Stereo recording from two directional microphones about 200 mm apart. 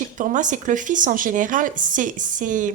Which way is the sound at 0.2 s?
40° right (ahead or behind).